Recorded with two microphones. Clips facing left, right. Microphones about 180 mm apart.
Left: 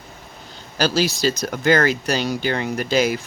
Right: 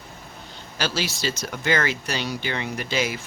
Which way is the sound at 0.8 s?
40° left (ahead or behind).